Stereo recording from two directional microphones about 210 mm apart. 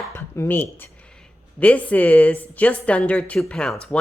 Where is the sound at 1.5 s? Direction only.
5° left (ahead or behind).